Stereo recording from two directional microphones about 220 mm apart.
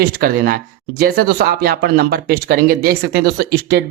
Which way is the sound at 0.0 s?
45° right (ahead or behind).